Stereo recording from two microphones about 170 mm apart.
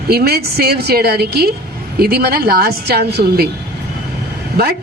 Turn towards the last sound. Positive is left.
turn(degrees=-70)  # may be behind; listen again after turning